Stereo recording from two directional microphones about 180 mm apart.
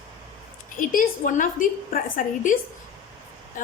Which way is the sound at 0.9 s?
45° left (ahead or behind).